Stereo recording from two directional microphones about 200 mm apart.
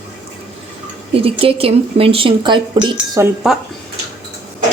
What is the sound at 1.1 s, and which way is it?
Speech, 30° right (ahead or behind).